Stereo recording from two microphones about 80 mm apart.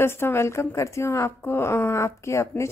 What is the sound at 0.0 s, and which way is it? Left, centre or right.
A woman's voice, left.